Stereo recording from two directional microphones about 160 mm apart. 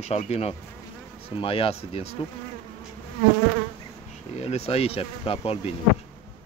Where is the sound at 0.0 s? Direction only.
40° left (ahead or behind).